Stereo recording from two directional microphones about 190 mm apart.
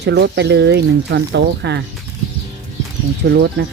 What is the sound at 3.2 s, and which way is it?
Speech, 65° right (ahead or behind).